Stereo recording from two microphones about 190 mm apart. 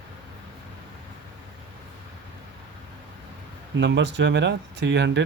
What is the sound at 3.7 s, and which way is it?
Speech, 70° right (ahead or behind).